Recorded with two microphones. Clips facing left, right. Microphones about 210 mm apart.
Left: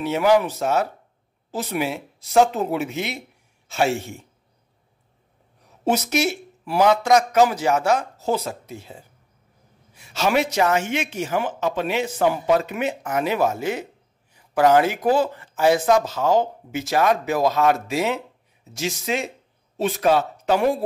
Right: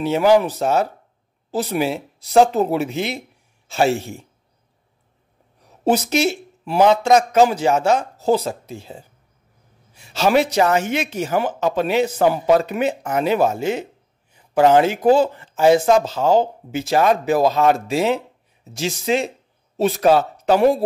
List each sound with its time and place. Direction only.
0.0 s speech: 30° right (ahead or behind)
5.9 s speech: 30° right (ahead or behind)